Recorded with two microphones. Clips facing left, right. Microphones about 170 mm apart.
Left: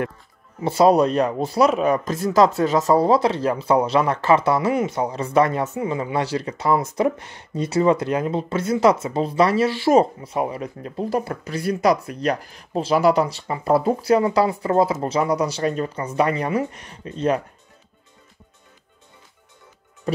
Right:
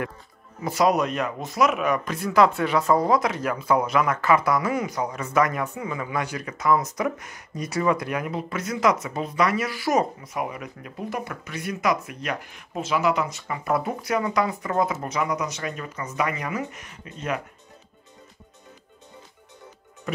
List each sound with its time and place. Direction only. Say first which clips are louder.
0.6 s speech: left 6 dB; 30° left (ahead or behind)